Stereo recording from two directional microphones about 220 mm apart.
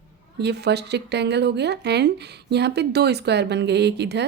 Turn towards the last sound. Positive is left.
turn(degrees=-50)  # may be behind; listen again after turning